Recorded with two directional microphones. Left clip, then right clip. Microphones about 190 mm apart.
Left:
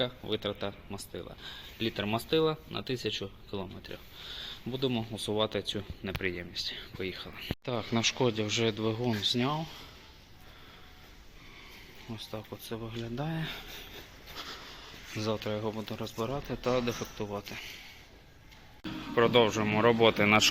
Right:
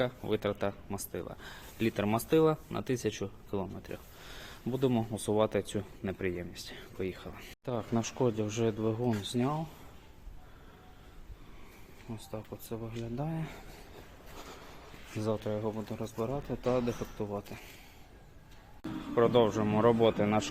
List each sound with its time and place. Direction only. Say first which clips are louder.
0.0 s speech: right 1 dB; 15° right (ahead or behind)
7.3 s speech: left 2 dB; 5° right (ahead or behind)
12.0 s speech: left 2 dB; centre (ahead or behind)
14.5 s a sound: left 5 dB; 15° right (ahead or behind)
15.4 s speech: left 1 dB; centre (ahead or behind)
17.0 s speech: left 1 dB; 10° right (ahead or behind)
18.8 s speech: left 1 dB; centre (ahead or behind)